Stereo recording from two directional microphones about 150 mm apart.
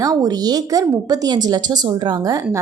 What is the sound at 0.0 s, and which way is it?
A woman's voice, 25° right (ahead or behind).